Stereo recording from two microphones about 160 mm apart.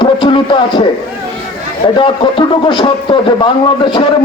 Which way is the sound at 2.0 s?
30° left (ahead or behind).